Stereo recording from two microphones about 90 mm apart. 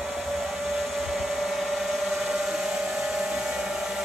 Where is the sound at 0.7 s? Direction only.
5° right (ahead or behind).